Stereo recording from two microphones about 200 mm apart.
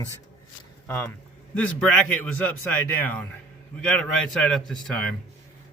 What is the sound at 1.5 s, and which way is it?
A man's voice, 5° left (ahead or behind).